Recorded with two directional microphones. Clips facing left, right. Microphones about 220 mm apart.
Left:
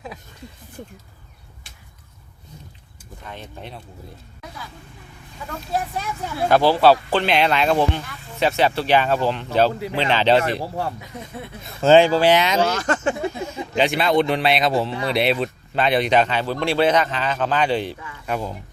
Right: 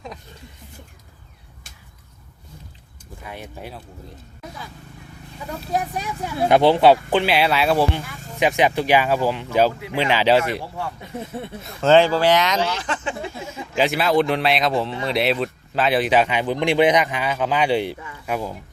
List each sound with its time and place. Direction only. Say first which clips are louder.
3.2 s speech: right 1 dB; 10° right (ahead or behind)
5.5 s speech: right 1 dB; 15° right (ahead or behind)
7.3 s speech: left 3 dB; 5° right (ahead or behind)
10.6 s speech: left 4 dB; 40° left (ahead or behind)
11.6 s speech: left 2 dB; 10° left (ahead or behind)
12.2 s speech: left 1 dB; 25° left (ahead or behind)
12.6 s speech: left 5 dB; 45° left (ahead or behind)
13.3 s speech: left 2 dB; 5° right (ahead or behind)